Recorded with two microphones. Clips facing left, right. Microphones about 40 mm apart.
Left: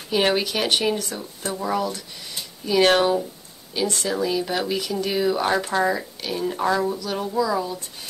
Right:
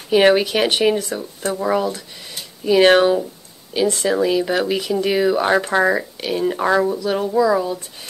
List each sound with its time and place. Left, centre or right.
0.1 s speech: right